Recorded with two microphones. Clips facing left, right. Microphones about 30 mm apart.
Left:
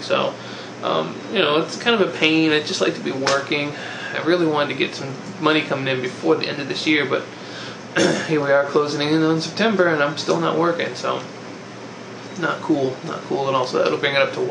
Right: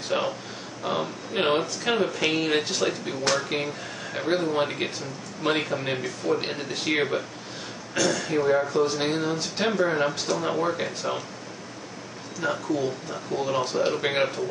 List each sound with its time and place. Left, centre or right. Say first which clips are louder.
0.1 s speech: left 6 dB; left
12.4 s speech: left 6 dB; left